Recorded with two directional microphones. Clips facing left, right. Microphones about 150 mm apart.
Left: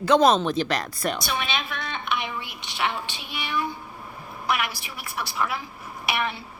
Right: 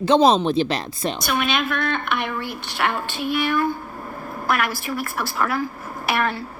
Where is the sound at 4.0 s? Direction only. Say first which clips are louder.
Right 7 dB; 65° right (ahead or behind).